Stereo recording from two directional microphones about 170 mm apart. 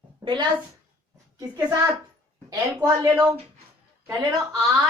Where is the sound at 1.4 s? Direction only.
15° right (ahead or behind).